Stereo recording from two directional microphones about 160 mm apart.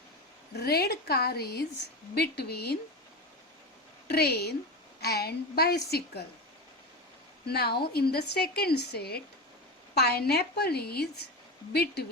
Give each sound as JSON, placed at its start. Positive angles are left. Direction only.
{"t": 0.5, "sound": "a woman's voice", "side_deg": 75}
{"t": 4.1, "sound": "a woman's voice", "side_deg": 85}
{"t": 7.4, "sound": "a woman's voice", "side_deg": 85}